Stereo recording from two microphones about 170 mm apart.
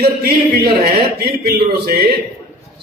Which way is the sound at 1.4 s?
60° right (ahead or behind).